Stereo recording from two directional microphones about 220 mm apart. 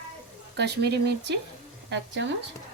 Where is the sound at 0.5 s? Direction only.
50° right (ahead or behind).